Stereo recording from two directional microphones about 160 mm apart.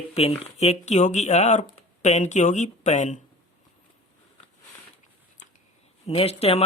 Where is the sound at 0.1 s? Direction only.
40° left (ahead or behind).